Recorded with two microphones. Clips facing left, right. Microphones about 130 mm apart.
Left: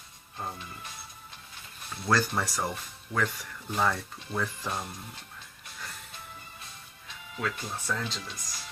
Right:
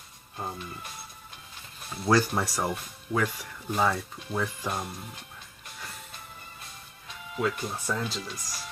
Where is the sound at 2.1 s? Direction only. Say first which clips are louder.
Right 3 dB; 15° right (ahead or behind).